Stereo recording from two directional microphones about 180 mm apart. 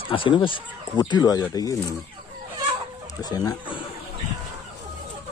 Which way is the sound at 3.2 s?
20° left (ahead or behind).